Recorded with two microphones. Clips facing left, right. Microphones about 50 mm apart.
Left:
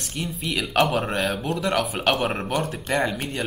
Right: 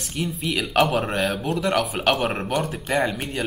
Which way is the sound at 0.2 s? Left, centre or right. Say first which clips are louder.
Right 2 dB; centre.